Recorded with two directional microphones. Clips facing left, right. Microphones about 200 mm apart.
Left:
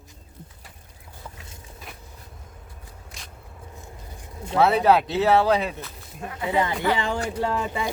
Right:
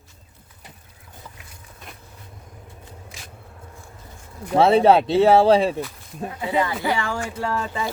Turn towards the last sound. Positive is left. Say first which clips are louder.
# even
turn(degrees=15)  # may be behind; listen again after turning